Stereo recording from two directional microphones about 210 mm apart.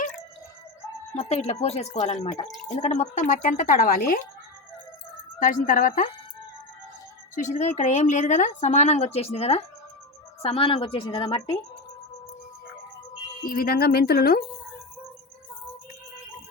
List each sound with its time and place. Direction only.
1.1 s a woman's voice: 30° left (ahead or behind)
5.4 s a woman's voice: 40° left (ahead or behind)
7.3 s a woman's voice: 35° left (ahead or behind)
13.4 s speech: 45° left (ahead or behind)